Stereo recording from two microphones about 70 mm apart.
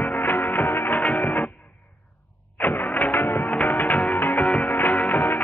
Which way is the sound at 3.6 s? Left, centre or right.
Left.